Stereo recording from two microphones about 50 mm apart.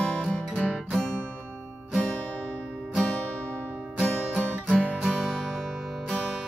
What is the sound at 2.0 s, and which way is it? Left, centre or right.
Music, left.